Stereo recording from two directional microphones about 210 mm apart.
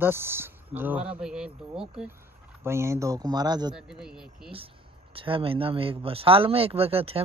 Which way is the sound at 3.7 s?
5° right (ahead or behind).